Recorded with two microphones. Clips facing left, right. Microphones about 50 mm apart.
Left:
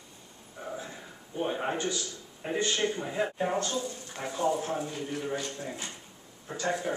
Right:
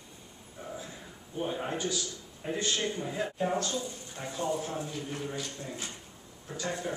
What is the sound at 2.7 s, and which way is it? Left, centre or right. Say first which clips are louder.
A man's voice: left 3 dB; left.